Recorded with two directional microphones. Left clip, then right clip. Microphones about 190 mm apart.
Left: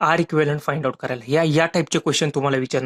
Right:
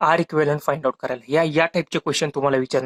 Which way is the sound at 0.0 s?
30° left (ahead or behind).